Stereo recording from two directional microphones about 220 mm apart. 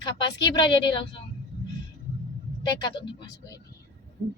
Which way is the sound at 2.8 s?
20° left (ahead or behind).